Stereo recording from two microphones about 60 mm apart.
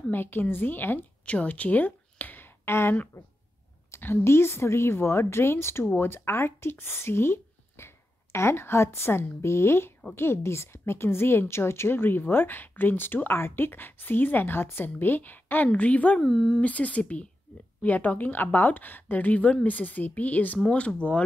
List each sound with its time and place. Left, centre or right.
0.1 s a woman's voice: left
1.2 s a sound: left
4.0 s a woman's voice: left
16.2 s speech: centre
16.6 s a woman's voice: left